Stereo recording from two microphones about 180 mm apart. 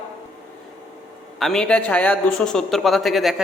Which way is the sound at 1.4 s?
Centre (ahead or behind).